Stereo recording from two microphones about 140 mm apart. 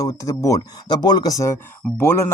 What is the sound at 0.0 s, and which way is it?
A man's voice, 25° left (ahead or behind).